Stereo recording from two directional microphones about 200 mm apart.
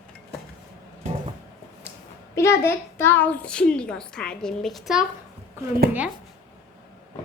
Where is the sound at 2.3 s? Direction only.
15° left (ahead or behind).